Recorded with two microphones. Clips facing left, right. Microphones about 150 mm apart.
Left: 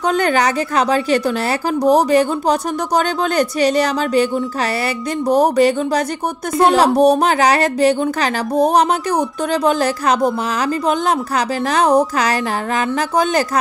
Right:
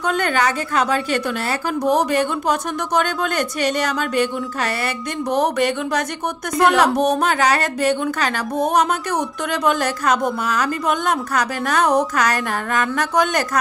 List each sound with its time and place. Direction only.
0.0 s a woman's voice: 40° left (ahead or behind)
5.3 s a woman's voice: 35° left (ahead or behind)
9.5 s a woman's voice: 30° left (ahead or behind)